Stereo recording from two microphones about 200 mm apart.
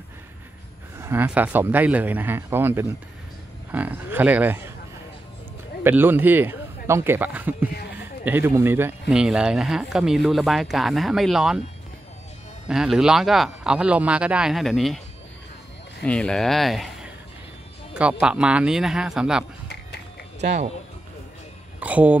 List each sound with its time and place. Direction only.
1.0 s speech: 10° right (ahead or behind)
5.9 s speech: 10° right (ahead or behind)
12.6 s speech: 5° right (ahead or behind)
16.0 s speech: 5° left (ahead or behind)
20.3 s speech: 35° right (ahead or behind)
21.7 s speech: 5° right (ahead or behind)